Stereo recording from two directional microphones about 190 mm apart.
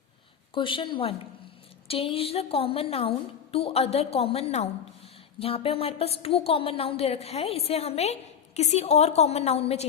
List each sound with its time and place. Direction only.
0.5 s a woman's voice: 25° left (ahead or behind)